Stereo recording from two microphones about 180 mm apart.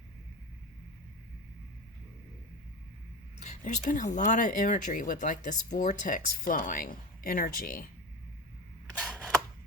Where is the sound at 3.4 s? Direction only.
40° left (ahead or behind).